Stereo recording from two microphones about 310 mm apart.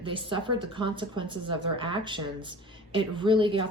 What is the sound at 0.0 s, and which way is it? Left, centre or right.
Speech, centre.